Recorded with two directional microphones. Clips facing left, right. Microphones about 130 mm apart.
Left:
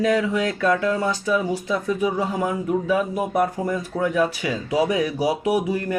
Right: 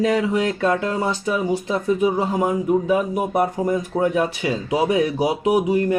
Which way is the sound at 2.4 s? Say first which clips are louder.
Right 4 dB; 20° right (ahead or behind).